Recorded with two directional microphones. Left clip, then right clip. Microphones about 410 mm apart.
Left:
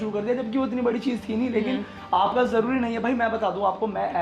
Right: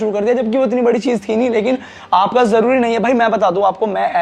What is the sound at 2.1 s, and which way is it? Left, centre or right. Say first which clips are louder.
A man's voice: right 9 dB; right.